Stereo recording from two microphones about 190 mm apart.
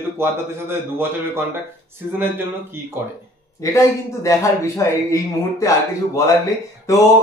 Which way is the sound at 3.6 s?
15° left (ahead or behind).